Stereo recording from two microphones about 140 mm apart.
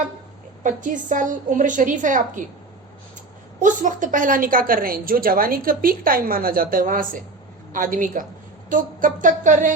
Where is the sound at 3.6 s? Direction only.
65° right (ahead or behind).